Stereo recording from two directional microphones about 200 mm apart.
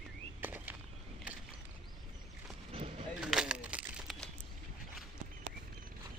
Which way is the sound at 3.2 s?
5° right (ahead or behind).